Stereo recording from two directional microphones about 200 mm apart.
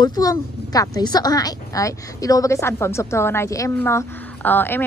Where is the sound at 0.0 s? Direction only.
20° left (ahead or behind).